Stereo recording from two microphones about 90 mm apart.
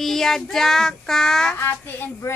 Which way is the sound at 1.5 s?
25° left (ahead or behind).